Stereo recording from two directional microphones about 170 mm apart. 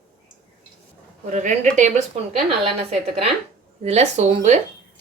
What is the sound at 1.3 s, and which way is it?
Speech, 45° right (ahead or behind).